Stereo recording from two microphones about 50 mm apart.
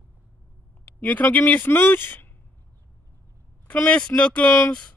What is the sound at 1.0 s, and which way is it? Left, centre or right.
Speech, left.